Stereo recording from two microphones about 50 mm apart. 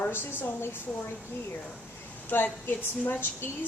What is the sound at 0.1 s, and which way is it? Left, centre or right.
Speech, left.